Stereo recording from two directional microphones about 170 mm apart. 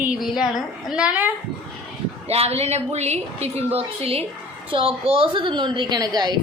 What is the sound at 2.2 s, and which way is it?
A woman's voice, 35° right (ahead or behind).